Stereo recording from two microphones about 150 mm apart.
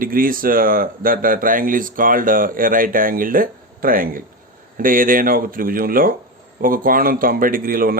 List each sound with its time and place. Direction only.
0.0 s speech: 70° right (ahead or behind)